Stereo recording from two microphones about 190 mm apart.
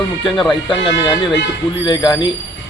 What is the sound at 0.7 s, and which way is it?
Speech, 25° left (ahead or behind).